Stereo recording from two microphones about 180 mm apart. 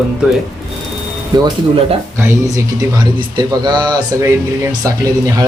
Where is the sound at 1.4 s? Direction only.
30° right (ahead or behind).